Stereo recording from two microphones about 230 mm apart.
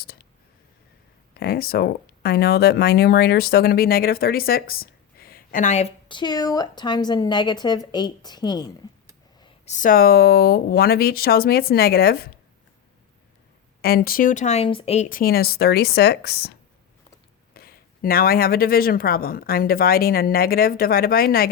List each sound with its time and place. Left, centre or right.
1.3 s speech: left; by 8.6 s centre
9.4 s speech: left
13.8 s speech: left